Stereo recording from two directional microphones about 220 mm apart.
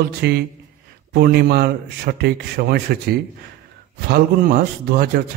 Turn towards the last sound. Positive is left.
turn(degrees=-45)  # may be behind; listen again after turning